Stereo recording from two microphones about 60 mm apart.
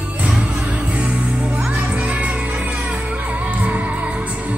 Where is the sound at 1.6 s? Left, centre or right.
Centre.